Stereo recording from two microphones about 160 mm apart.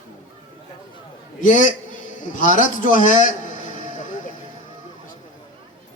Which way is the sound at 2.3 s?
55° left (ahead or behind).